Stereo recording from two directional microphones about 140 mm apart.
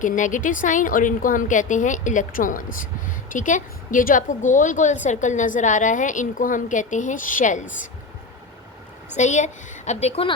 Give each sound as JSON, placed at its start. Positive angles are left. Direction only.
{"t": 0.0, "sound": "a woman's voice", "side_deg": 65}
{"t": 9.1, "sound": "a woman's voice", "side_deg": 60}